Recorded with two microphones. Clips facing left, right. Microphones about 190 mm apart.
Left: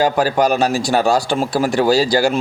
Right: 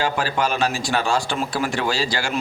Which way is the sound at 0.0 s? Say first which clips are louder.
Left 7 dB; 40° left (ahead or behind).